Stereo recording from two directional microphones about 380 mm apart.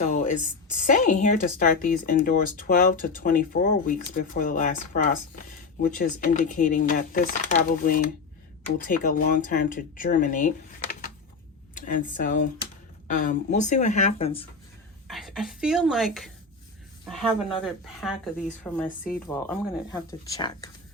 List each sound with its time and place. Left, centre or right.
0.0 s a sound: centre
0.8 s speech: centre
11.9 s speech: left
15.0 s speech: centre